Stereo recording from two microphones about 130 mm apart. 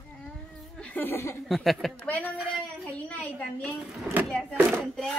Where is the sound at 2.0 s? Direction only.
10° left (ahead or behind).